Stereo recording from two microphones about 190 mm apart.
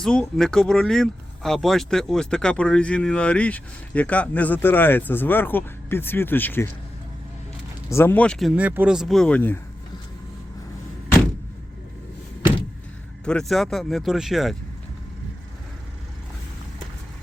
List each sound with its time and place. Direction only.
0.0 s speech: 5° left (ahead or behind)
7.9 s speech: 10° left (ahead or behind)
13.2 s speech: 5° left (ahead or behind)